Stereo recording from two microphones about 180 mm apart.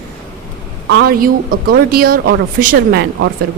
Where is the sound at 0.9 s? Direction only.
55° right (ahead or behind).